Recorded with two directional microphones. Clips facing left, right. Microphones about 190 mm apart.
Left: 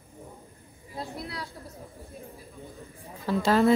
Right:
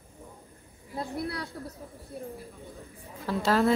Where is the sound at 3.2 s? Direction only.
Centre (ahead or behind).